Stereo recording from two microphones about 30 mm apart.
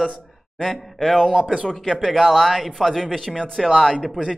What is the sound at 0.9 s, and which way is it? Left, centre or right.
A man's voice, centre.